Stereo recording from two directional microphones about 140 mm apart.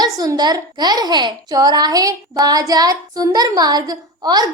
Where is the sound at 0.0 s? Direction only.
30° right (ahead or behind).